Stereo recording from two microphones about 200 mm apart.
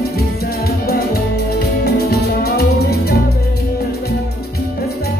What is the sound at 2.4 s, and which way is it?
Music, 55° left (ahead or behind).